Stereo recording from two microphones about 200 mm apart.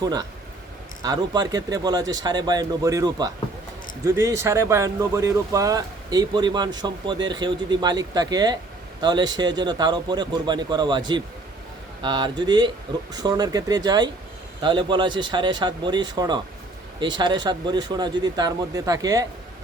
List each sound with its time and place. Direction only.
0.0 s speech: 20° right (ahead or behind)